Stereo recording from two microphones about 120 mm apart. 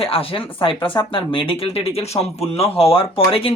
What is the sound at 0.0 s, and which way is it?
Speech, 50° left (ahead or behind).